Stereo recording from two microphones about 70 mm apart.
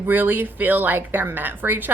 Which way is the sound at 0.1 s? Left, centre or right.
Right.